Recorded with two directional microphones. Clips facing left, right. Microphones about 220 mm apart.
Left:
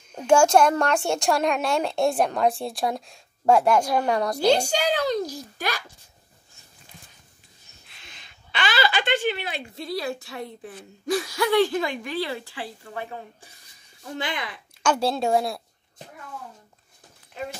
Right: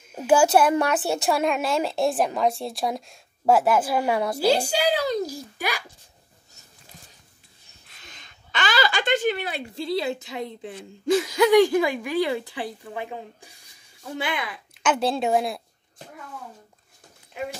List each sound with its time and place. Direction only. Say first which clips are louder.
0.1 s a child's voice: left 1 dB; 5° right (ahead or behind)
7.9 s a sound: right 2 dB; 40° right (ahead or behind)
9.8 s a woman's voice: right 4 dB; 25° right (ahead or behind); by 15.5 s 5° right (ahead or behind)